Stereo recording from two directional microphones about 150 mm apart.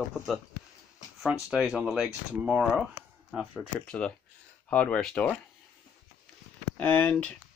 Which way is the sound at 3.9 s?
10° left (ahead or behind).